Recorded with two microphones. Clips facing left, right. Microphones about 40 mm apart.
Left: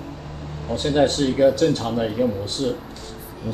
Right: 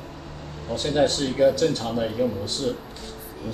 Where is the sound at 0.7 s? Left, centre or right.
Centre.